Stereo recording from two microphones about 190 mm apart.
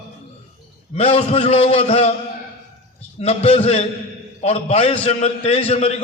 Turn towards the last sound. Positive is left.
turn(degrees=30)  # may be behind; listen again after turning